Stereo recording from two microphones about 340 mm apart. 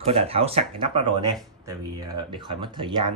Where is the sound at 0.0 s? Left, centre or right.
Centre.